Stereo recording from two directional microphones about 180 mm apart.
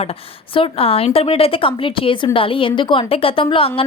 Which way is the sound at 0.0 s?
30° left (ahead or behind).